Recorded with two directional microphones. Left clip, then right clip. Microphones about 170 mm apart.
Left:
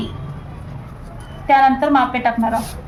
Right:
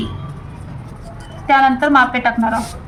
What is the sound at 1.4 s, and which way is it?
A woman's voice, centre (ahead or behind).